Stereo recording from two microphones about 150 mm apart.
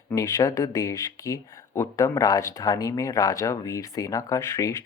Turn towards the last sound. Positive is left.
turn(degrees=20)  # may be behind; listen again after turning